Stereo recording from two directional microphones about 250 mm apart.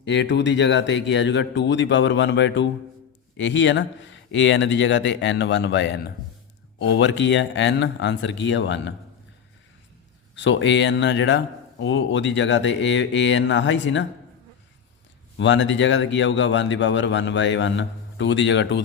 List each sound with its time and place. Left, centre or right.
0.0 s a man's voice: left
10.3 s a man's voice: left
15.4 s a man's voice: left